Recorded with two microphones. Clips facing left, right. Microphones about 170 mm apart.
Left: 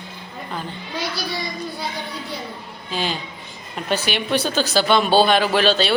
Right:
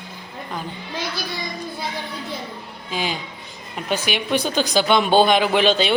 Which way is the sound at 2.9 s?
10° right (ahead or behind).